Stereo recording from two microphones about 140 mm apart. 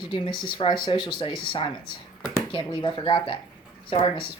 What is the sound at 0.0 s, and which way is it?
Speech, 35° left (ahead or behind).